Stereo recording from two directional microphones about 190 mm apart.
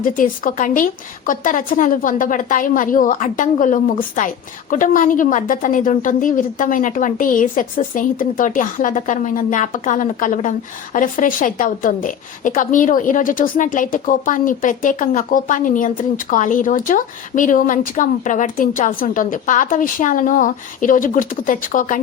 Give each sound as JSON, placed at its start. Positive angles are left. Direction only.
{"t": 0.0, "sound": "a woman's voice", "side_deg": 45}